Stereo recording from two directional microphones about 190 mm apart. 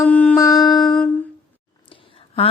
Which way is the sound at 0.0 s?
5° left (ahead or behind).